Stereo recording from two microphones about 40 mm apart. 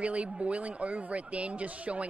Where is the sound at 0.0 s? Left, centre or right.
Right.